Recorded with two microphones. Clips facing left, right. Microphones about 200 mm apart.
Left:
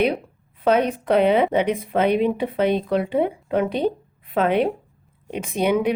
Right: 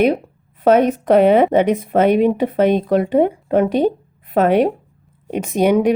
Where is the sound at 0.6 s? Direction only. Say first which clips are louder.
Right 6 dB; 45° right (ahead or behind).